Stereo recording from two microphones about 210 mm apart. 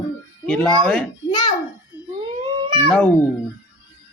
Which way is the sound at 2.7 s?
20° right (ahead or behind).